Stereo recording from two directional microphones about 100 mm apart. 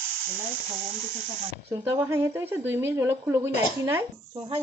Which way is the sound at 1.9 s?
30° right (ahead or behind).